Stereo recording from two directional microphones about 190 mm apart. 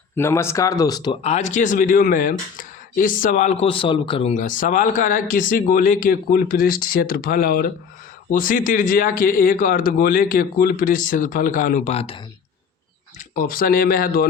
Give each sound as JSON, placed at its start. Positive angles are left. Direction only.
{"t": 0.2, "sound": "speech", "side_deg": 15}
{"t": 1.2, "sound": "speech", "side_deg": 35}
{"t": 13.1, "sound": "speech", "side_deg": 45}